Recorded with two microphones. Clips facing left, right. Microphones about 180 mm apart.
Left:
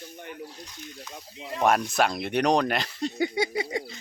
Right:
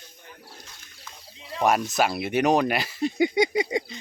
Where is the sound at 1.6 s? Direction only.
Centre (ahead or behind).